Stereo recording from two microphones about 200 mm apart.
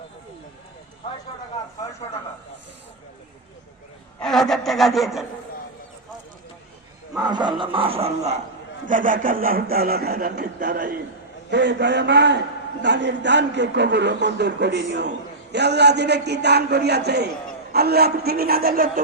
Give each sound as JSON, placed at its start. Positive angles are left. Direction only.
{"t": 4.2, "sound": "speech", "side_deg": 0}
{"t": 7.2, "sound": "speech", "side_deg": -20}
{"t": 11.5, "sound": "a man's voice", "side_deg": -60}